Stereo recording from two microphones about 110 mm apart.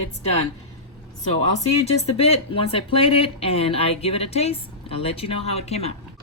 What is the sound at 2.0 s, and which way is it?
A woman's voice, 65° left (ahead or behind).